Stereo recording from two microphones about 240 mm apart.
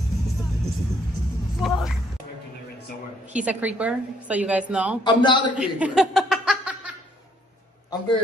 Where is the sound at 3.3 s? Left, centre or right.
Centre.